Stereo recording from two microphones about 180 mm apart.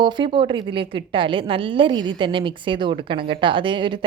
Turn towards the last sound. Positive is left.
turn(degrees=-25)  # may be behind; listen again after turning